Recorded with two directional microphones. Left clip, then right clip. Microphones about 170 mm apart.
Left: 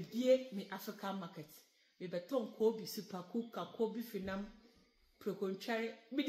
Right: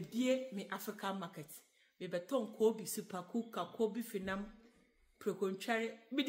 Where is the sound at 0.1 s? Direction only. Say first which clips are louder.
Left 4 dB; 20° right (ahead or behind).